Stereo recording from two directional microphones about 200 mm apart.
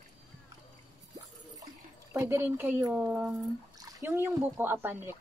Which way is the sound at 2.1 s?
15° right (ahead or behind).